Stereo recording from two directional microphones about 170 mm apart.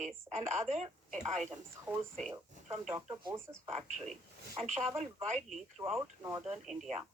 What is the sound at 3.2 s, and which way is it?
Speech, 20° right (ahead or behind).